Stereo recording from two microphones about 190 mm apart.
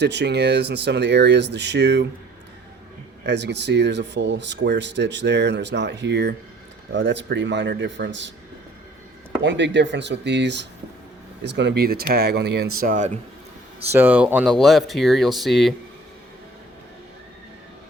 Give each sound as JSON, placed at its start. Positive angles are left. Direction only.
{"t": 0.0, "sound": "speech", "side_deg": -65}
{"t": 3.2, "sound": "speech", "side_deg": -65}
{"t": 9.4, "sound": "speech", "side_deg": -70}
{"t": 13.9, "sound": "speech", "side_deg": -10}